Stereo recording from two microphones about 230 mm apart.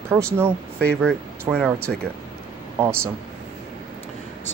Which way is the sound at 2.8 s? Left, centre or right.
Centre.